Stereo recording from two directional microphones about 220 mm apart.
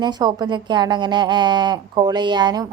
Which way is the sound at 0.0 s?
20° right (ahead or behind).